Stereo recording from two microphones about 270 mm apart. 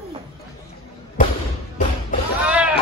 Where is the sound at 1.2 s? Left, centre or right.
Left.